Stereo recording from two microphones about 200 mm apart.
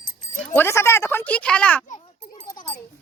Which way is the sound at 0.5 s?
10° left (ahead or behind).